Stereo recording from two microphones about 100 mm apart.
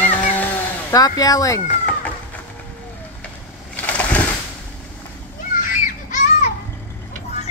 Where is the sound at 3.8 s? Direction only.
15° left (ahead or behind).